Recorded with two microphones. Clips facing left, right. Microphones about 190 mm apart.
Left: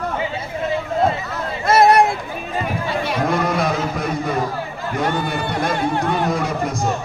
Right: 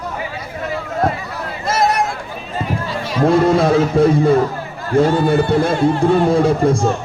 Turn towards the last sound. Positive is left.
turn(degrees=-30)  # may be behind; listen again after turning